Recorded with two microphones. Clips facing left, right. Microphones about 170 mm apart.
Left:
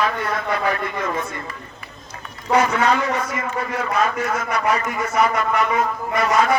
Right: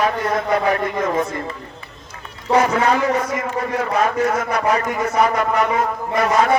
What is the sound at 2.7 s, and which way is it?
A man's voice, 30° right (ahead or behind).